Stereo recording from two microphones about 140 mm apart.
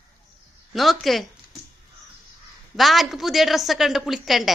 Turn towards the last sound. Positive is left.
turn(degrees=0)  # may be behind; listen again after turning